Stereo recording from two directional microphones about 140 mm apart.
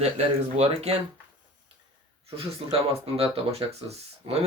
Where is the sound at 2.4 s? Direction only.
45° right (ahead or behind).